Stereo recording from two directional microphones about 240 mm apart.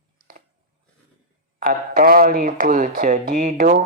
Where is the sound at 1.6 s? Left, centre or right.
Right.